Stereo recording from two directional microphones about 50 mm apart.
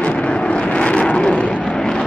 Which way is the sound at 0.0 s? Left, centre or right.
Left.